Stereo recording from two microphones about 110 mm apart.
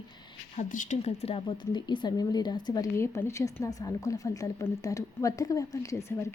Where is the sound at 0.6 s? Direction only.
85° left.